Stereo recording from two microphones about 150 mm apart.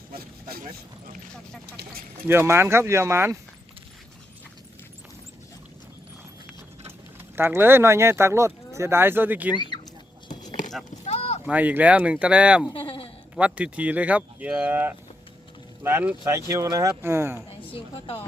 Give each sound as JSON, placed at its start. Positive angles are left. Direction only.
{"t": 0.1, "sound": "a sound", "side_deg": -85}
{"t": 2.2, "sound": "speech", "side_deg": -15}
{"t": 7.3, "sound": "speech", "side_deg": -15}
{"t": 9.6, "sound": "speech", "side_deg": 30}
{"t": 11.0, "sound": "a sound", "side_deg": 45}
{"t": 11.4, "sound": "speech", "side_deg": -10}
{"t": 12.7, "sound": "bleat", "side_deg": 40}
{"t": 13.3, "sound": "speech", "side_deg": -10}
{"t": 17.6, "sound": "a woman's voice", "side_deg": 35}